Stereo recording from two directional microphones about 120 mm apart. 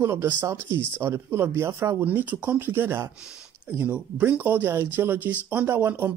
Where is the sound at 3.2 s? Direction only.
5° right (ahead or behind).